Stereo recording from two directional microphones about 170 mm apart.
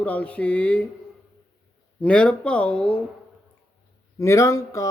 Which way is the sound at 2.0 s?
5° left (ahead or behind).